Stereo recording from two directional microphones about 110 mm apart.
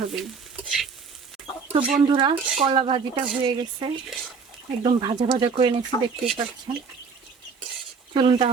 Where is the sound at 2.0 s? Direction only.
45° right (ahead or behind).